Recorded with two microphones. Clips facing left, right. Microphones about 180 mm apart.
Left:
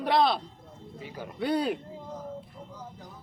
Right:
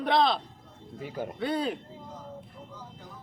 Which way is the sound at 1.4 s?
5° left (ahead or behind).